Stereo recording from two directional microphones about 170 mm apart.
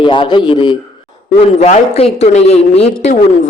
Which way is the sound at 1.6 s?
40° left (ahead or behind).